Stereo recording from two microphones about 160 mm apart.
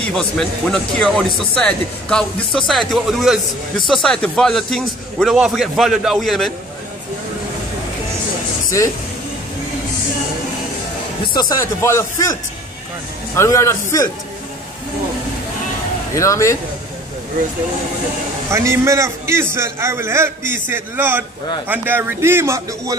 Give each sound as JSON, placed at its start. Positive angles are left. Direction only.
{"t": 0.1, "sound": "speech", "side_deg": 5}
{"t": 11.3, "sound": "speech", "side_deg": 20}
{"t": 13.4, "sound": "speech", "side_deg": 15}
{"t": 16.2, "sound": "speech", "side_deg": 20}
{"t": 18.5, "sound": "a man's voice", "side_deg": -20}